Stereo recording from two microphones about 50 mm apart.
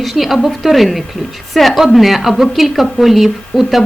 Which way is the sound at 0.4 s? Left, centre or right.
Centre.